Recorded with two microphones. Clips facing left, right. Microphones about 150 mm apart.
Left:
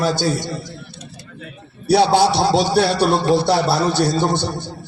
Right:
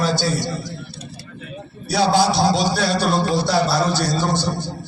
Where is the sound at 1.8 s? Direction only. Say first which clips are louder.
Left 3 dB; 65° left (ahead or behind).